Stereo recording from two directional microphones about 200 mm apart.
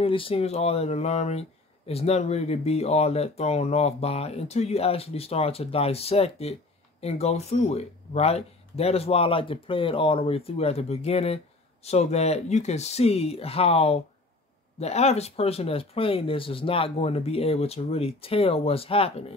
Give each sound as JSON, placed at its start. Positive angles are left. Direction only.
{"t": 0.0, "sound": "speech", "side_deg": 30}